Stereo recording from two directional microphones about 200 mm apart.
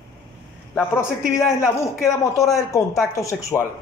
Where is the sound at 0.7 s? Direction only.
10° left (ahead or behind).